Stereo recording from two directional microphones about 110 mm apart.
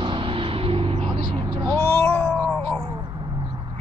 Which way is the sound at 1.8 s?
25° left (ahead or behind).